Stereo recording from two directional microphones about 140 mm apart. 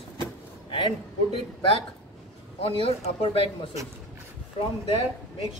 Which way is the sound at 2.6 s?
45° left (ahead or behind).